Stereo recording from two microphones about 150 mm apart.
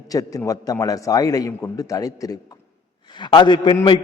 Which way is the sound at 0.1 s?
25° left (ahead or behind).